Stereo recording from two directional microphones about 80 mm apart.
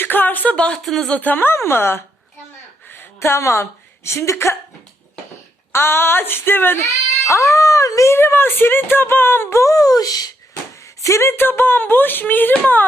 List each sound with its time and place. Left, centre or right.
0.0 s speech: left
0.8 s speech: centre
1.1 s a woman's voice: left
5.7 s speech: left
7.3 s speech: left
11.0 s speech: left